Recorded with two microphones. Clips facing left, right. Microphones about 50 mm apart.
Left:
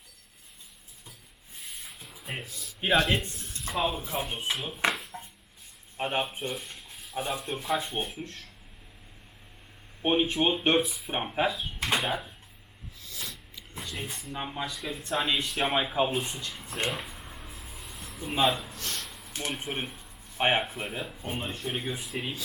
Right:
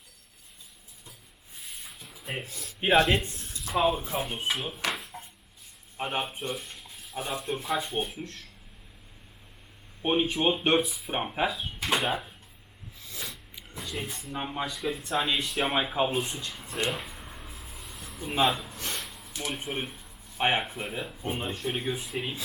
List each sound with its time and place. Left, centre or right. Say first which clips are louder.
1.6 s a sound: even; centre
2.4 s speech: right 1 dB; right
2.8 s speech: right 3 dB; right
3.7 s speech: right 4 dB; centre
5.1 s chopping: left 1 dB; centre
6.0 s speech: left 1 dB; centre
10.1 s speech: even; centre
13.8 s speech: right 2 dB; centre
16.9 s a sound: even; centre
18.7 s a sound: right 1 dB; centre
19.0 s a sound: even; centre
19.5 s speech: right 1 dB; centre